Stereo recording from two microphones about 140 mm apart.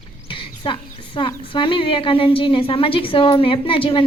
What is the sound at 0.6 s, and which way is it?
A woman's voice, 40° left (ahead or behind).